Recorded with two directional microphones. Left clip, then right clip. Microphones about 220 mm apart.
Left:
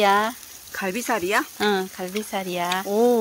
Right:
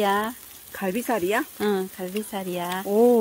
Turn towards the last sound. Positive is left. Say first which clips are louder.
# even
turn(degrees=-15)  # may be behind; listen again after turning